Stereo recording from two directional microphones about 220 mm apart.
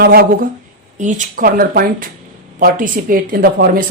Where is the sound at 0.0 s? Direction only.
45° right (ahead or behind).